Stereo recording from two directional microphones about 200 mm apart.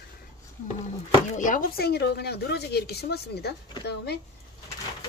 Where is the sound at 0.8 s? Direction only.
40° left (ahead or behind).